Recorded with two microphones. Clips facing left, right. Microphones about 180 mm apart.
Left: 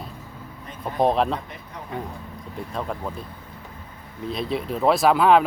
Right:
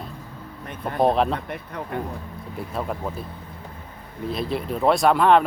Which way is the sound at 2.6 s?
5° right (ahead or behind).